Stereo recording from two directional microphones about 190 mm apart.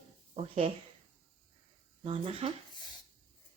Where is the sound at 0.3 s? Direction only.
35° right (ahead or behind).